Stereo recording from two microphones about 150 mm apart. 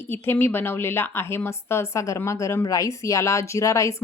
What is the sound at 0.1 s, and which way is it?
A woman's voice, 15° left (ahead or behind).